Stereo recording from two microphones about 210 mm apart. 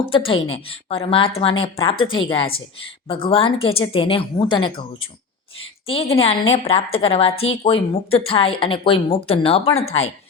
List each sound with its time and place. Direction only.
0.1 s speech: 25° left (ahead or behind)
5.9 s speech: 25° left (ahead or behind)